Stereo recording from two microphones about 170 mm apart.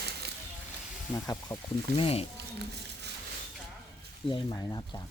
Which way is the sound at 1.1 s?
20° left (ahead or behind).